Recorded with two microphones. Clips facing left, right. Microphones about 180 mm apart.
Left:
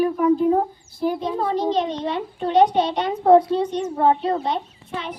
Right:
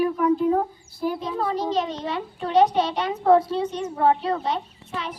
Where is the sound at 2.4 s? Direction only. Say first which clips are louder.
Left 2 dB; 30° left (ahead or behind).